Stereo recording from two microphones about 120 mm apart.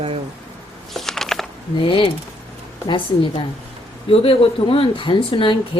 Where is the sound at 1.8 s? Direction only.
45° left (ahead or behind).